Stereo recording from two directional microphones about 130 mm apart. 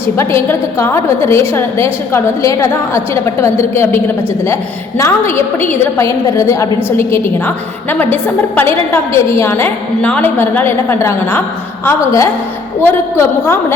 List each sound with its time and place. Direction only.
0.2 s a woman's voice: 20° left (ahead or behind)